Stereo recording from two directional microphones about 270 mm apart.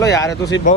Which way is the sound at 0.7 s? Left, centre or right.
Left.